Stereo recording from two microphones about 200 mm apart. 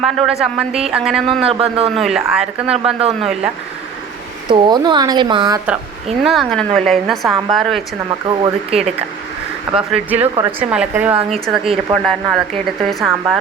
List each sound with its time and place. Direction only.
0.0 s a woman's voice: centre (ahead or behind)
1.4 s speech: 30° right (ahead or behind)
2.0 s a woman's voice: centre (ahead or behind)
4.4 s speech: 20° right (ahead or behind)
6.2 s a woman's voice: centre (ahead or behind)
8.3 s speech: 25° right (ahead or behind)
9.7 s a woman's voice: 5° right (ahead or behind)
11.9 s speech: 25° right (ahead or behind)
12.8 s a woman's voice: centre (ahead or behind)